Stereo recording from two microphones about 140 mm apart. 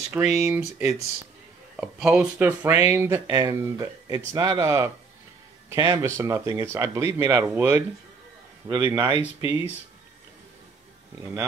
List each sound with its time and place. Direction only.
0.3 s speech: 20° right (ahead or behind)
8.6 s speech: 25° right (ahead or behind)